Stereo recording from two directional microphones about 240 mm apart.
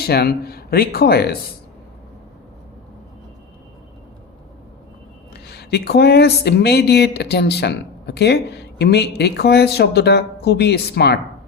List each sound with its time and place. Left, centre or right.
0.0 s speech: left
5.3 s speech: left